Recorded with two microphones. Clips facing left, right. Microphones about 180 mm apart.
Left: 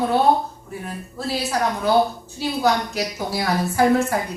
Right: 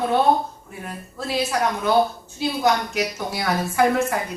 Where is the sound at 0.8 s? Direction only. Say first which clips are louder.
Left 1 dB; 35° left (ahead or behind).